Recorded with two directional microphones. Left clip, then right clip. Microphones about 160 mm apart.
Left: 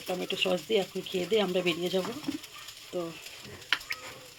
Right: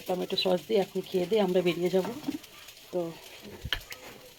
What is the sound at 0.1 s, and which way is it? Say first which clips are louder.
Speech: right 2 dB; 5° right (ahead or behind).